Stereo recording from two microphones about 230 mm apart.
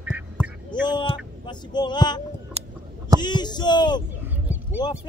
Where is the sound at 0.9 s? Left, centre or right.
Centre.